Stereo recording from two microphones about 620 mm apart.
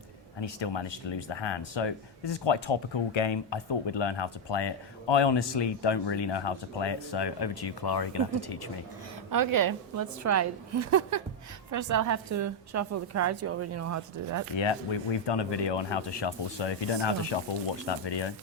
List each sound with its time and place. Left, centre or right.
0.3 s speech: left
9.3 s a woman's voice: right
15.3 s speech: left